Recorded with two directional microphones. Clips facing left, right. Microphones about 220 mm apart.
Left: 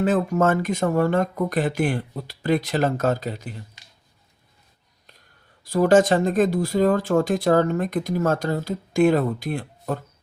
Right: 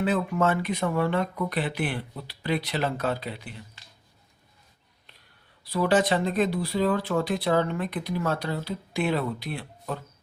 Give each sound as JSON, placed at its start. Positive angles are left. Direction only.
{"t": 0.0, "sound": "speech", "side_deg": 45}
{"t": 5.6, "sound": "speech", "side_deg": 45}